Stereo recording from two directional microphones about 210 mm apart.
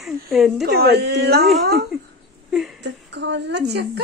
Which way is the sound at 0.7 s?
50° right (ahead or behind).